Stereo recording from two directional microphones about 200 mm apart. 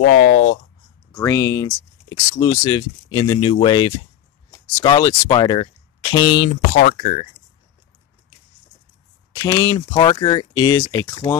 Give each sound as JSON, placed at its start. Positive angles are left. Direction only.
{"t": 0.0, "sound": "speech", "side_deg": 40}
{"t": 1.1, "sound": "speech", "side_deg": 15}
{"t": 6.7, "sound": "speech", "side_deg": 40}
{"t": 9.3, "sound": "speech", "side_deg": 20}